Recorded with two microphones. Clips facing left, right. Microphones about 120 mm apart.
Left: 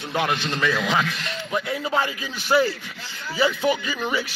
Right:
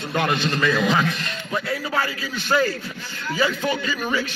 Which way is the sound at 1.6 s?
20° left (ahead or behind).